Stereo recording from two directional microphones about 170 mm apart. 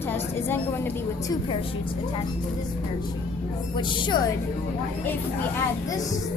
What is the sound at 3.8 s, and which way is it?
Speech, 30° left (ahead or behind).